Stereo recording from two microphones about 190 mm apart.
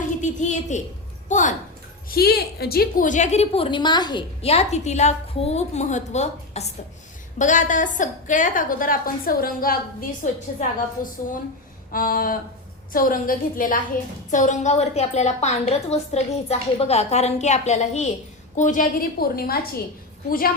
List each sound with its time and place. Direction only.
0.2 s a sound: 40° left (ahead or behind)
1.3 s a woman's voice: 40° left (ahead or behind)
2.0 s a woman's voice: 55° left (ahead or behind)
10.2 s a woman's voice: 40° left (ahead or behind)